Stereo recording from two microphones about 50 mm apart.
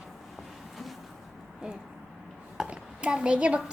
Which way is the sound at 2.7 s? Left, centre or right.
Right.